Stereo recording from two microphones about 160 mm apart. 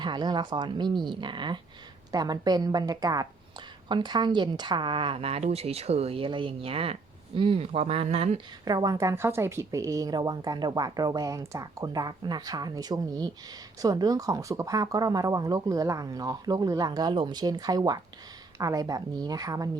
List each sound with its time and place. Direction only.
0.0 s a woman's voice: 25° right (ahead or behind)
8.6 s a woman's voice: 25° right (ahead or behind)